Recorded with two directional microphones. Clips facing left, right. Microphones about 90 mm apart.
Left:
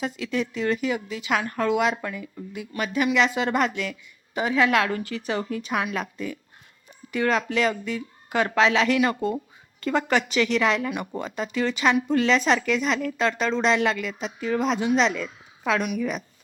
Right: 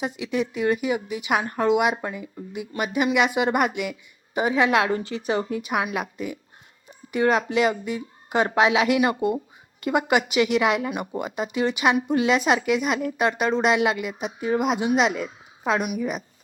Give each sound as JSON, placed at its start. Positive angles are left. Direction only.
{"t": 0.0, "sound": "a woman's voice", "side_deg": -20}